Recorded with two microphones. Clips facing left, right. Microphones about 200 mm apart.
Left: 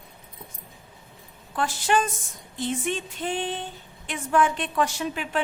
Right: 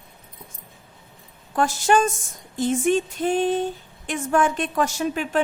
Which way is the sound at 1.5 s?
45° right (ahead or behind).